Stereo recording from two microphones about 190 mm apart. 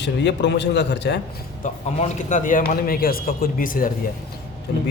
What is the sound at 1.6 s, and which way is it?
Speech, 40° left (ahead or behind).